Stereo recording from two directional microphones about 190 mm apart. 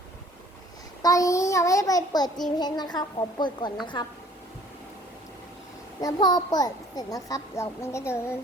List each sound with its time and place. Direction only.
1.0 s a child's voice: 15° left (ahead or behind)
6.0 s a child's voice: 20° left (ahead or behind)